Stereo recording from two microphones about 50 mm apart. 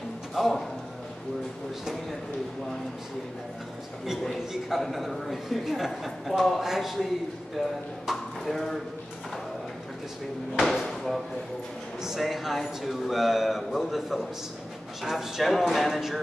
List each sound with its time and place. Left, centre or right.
0.3 s a man's voice: centre
4.2 s a man's voice: centre
8.1 s speech: centre
10.6 s a man's voice: centre